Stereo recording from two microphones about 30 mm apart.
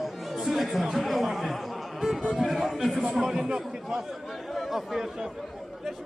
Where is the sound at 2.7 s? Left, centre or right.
Centre.